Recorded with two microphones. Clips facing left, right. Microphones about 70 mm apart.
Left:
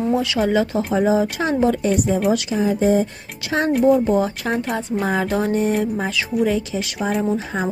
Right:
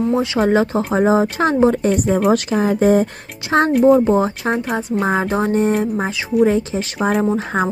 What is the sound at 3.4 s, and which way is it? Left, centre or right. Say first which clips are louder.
Speech: right 6 dB; right.